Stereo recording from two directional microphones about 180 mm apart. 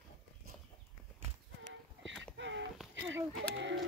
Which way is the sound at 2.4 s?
90° right.